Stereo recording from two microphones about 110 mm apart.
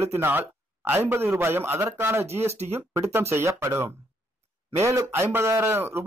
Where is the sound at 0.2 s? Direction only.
15° right (ahead or behind).